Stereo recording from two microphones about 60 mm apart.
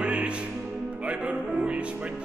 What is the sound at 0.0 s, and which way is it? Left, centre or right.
Music, centre.